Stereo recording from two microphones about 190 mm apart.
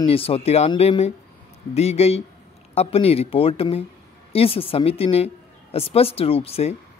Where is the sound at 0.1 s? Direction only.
30° left (ahead or behind).